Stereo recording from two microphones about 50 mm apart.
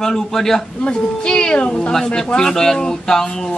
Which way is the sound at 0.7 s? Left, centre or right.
Centre.